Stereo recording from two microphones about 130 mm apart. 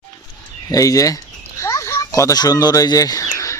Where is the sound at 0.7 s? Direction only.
25° left (ahead or behind).